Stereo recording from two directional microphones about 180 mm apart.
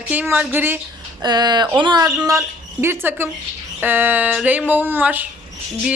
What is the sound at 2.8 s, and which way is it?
A woman's voice, 10° right (ahead or behind).